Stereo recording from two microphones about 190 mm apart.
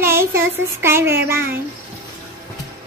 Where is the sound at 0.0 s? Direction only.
15° right (ahead or behind).